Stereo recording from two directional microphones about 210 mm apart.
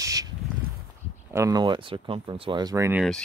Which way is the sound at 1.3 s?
15° right (ahead or behind).